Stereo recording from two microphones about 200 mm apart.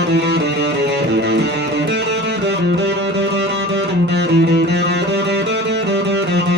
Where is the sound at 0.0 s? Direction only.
55° right (ahead or behind).